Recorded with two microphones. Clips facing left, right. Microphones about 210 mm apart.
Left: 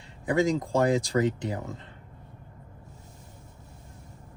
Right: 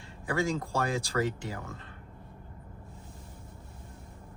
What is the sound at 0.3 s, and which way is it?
Speech, 20° left (ahead or behind).